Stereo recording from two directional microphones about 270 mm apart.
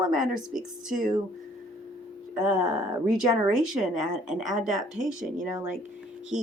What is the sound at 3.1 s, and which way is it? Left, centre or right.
A woman's voice, centre.